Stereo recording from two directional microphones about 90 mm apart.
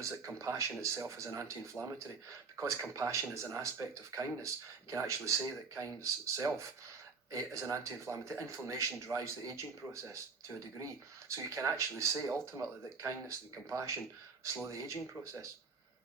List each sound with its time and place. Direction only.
0.0 s speech: 35° right (ahead or behind)